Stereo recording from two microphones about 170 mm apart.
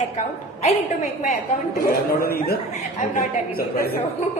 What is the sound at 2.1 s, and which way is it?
A woman's voice, 60° left (ahead or behind).